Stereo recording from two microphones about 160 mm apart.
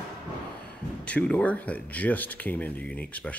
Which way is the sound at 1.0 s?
10° left (ahead or behind).